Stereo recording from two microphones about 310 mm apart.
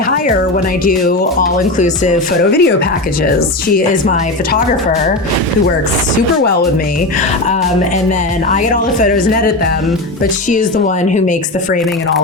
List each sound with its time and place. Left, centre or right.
0.9 s speech: left
8.7 s speech: left